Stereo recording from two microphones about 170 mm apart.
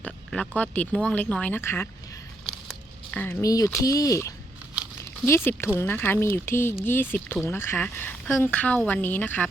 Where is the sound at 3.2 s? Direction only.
15° left (ahead or behind).